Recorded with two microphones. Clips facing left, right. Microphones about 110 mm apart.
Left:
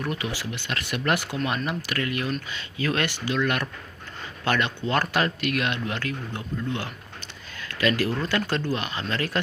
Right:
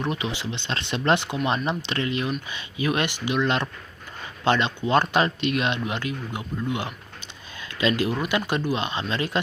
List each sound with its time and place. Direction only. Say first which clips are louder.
0.0 s speech: right 2 dB; 20° right (ahead or behind)